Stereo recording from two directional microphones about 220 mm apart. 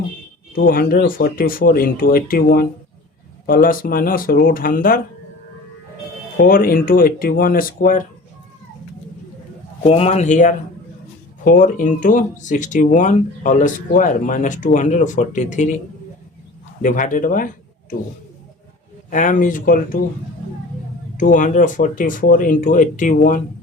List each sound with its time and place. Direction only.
0.7 s speech: 40° left (ahead or behind)
6.3 s speech: 40° left (ahead or behind)
9.8 s speech: 30° left (ahead or behind)
16.8 s speech: 35° left (ahead or behind)
19.1 s speech: 35° left (ahead or behind)
21.2 s speech: 35° left (ahead or behind)